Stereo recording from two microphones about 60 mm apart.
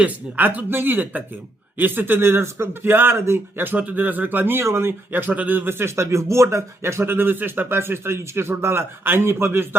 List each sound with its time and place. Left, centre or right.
0.0 s a man's voice: right